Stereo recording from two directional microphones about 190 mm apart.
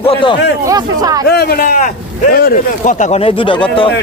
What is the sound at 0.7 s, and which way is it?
Speech, 20° right (ahead or behind).